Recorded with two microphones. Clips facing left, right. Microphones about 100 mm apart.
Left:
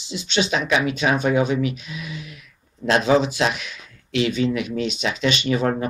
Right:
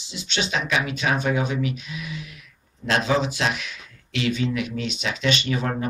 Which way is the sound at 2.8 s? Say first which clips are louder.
Left 4 dB; 20° left (ahead or behind).